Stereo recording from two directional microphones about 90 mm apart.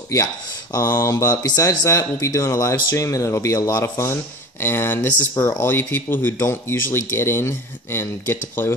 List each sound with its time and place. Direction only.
0.7 s speech: 30° left (ahead or behind)
1.3 s speech: 40° left (ahead or behind); by 8.7 s 25° left (ahead or behind)